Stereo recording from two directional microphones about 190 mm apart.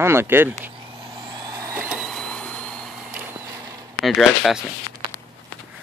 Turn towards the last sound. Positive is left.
turn(degrees=0)  # may be behind; listen again after turning